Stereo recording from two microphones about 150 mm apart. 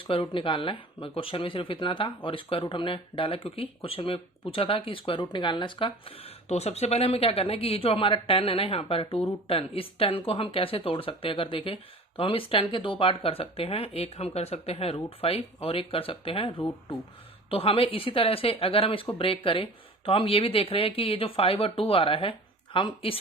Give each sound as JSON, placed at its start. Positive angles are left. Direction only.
{"t": 0.0, "sound": "speech", "side_deg": 35}